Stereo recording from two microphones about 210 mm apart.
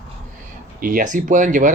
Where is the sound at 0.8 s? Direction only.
40° right (ahead or behind).